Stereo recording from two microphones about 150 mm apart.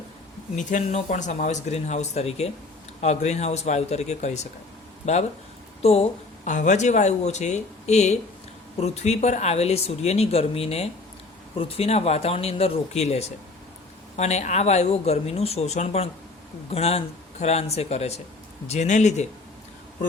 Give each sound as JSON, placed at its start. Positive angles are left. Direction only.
{"t": 0.5, "sound": "speech", "side_deg": 55}
{"t": 5.8, "sound": "speech", "side_deg": 45}